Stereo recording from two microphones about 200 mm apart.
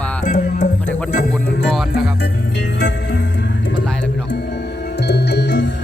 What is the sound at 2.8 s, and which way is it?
Music, 65° left (ahead or behind).